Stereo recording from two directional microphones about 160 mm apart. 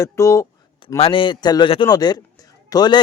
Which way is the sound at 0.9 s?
35° left (ahead or behind).